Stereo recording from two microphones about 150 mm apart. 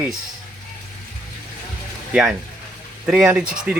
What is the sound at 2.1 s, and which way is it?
Speech, 5° right (ahead or behind).